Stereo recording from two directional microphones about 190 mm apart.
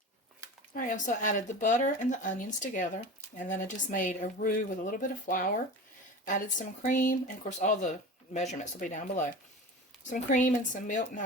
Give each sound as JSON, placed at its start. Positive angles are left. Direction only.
{"t": 0.7, "sound": "speech", "side_deg": 45}